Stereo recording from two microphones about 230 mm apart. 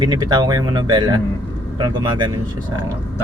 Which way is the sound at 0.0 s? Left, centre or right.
Centre.